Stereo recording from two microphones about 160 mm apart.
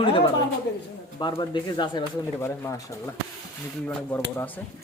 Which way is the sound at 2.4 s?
20° left (ahead or behind).